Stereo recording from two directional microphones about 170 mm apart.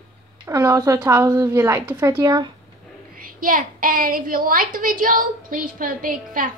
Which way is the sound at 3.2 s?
55° right (ahead or behind).